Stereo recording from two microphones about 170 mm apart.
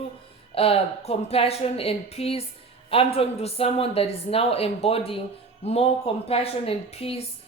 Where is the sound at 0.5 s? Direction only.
35° left (ahead or behind).